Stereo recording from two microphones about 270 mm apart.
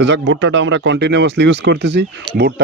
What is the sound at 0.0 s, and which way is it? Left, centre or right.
Speech, right.